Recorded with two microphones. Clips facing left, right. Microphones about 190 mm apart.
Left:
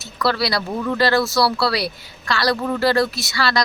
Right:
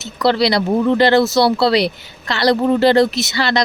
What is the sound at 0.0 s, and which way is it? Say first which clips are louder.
A woman's voice: right 6 dB; 20° right (ahead or behind).